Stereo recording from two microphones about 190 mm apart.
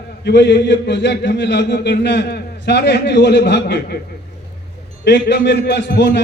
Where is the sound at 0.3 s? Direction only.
65° left (ahead or behind).